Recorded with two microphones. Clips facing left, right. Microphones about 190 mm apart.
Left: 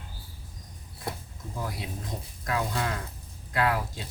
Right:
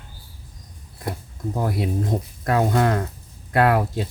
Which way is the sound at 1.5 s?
60° right (ahead or behind).